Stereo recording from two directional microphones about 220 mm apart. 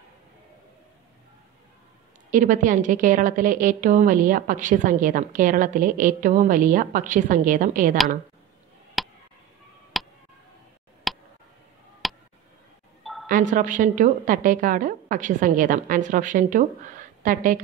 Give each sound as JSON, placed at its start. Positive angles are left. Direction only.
{"t": 2.3, "sound": "a woman's voice", "side_deg": -35}
{"t": 9.0, "sound": "tick", "side_deg": 0}
{"t": 11.1, "sound": "a sound", "side_deg": 0}
{"t": 13.3, "sound": "a woman's voice", "side_deg": -35}